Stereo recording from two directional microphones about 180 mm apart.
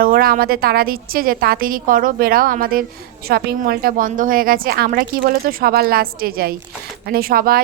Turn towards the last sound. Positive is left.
turn(degrees=-55)  # may be behind; listen again after turning